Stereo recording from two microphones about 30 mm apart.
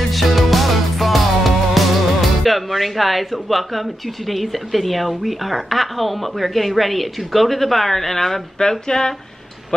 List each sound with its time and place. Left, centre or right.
0.1 s music: centre
2.4 s speech: centre
8.5 s speech: left